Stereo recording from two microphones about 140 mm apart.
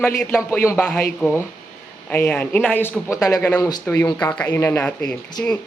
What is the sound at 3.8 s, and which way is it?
Speech, 10° left (ahead or behind).